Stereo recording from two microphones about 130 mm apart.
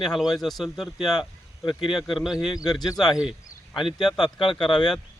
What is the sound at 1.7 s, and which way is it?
Speech, 40° left (ahead or behind).